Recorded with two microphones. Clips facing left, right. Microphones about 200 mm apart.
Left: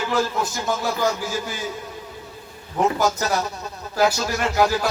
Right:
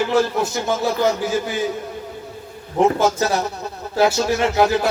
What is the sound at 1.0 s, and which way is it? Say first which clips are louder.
Speech: right 4 dB; 20° right (ahead or behind).